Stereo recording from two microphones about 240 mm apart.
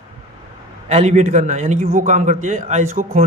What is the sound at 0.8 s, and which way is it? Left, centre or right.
A man's voice, right.